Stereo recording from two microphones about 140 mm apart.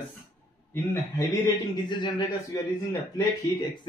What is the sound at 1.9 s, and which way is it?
Speech, 30° left (ahead or behind).